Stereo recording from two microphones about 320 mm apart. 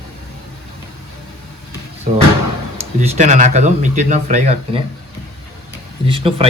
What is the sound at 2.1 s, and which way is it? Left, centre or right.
Drawer open or close, right.